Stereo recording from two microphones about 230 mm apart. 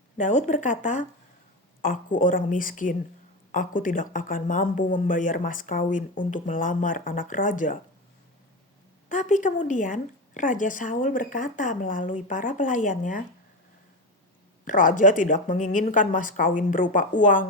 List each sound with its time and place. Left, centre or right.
0.2 s speech: left
9.0 s speech: left
14.6 s speech: left